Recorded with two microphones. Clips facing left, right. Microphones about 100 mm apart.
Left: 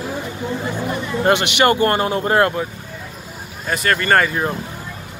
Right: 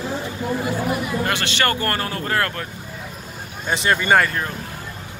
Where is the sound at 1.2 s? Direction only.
20° left (ahead or behind).